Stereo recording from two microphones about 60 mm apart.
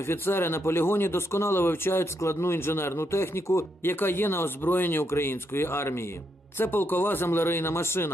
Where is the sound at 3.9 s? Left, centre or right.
Left.